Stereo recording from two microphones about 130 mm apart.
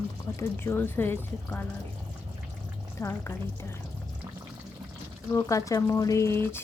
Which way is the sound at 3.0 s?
20° left (ahead or behind).